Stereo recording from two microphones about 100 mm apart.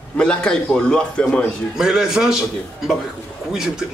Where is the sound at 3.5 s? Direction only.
5° right (ahead or behind).